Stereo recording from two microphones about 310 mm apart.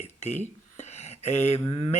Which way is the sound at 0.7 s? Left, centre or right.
Left.